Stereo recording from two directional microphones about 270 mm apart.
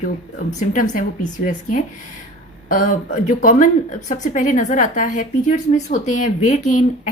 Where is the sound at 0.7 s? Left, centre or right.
Left.